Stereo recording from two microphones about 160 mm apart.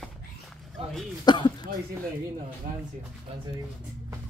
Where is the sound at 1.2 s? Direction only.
25° left (ahead or behind).